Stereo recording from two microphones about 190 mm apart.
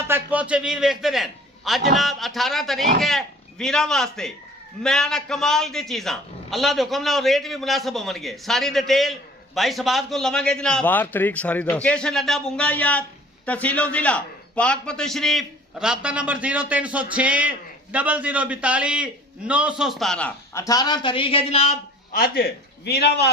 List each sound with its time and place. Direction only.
0.1 s a man's voice: 10° right (ahead or behind)
20.6 s speech: 20° left (ahead or behind)
22.1 s a man's voice: 50° left (ahead or behind)